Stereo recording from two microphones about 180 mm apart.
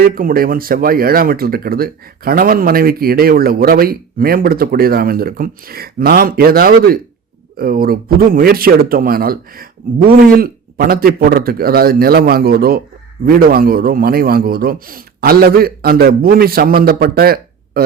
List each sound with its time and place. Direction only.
0.0 s speech: 55° right (ahead or behind)